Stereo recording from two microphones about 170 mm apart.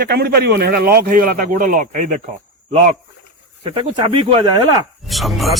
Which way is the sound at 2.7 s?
40° right (ahead or behind).